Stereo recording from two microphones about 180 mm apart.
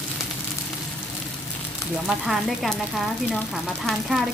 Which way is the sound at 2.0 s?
Centre (ahead or behind).